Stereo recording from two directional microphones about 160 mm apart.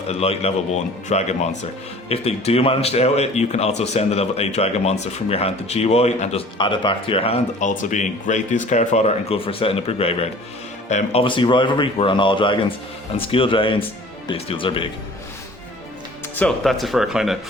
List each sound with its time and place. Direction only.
0.1 s speech: 40° left (ahead or behind)
6.6 s speech: 30° left (ahead or behind)
7.8 s speech: 50° left (ahead or behind); by 14.8 s 35° left (ahead or behind)
16.3 s speech: 5° left (ahead or behind)